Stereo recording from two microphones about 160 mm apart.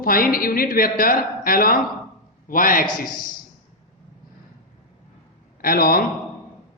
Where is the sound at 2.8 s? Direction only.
25° left (ahead or behind).